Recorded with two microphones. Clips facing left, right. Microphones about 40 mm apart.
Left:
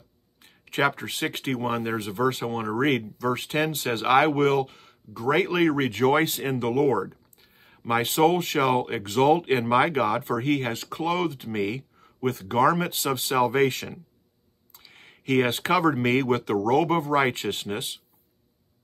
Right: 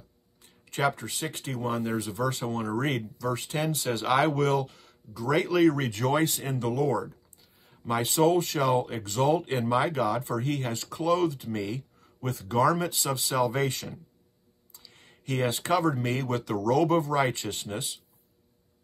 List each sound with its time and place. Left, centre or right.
0.4 s speech: left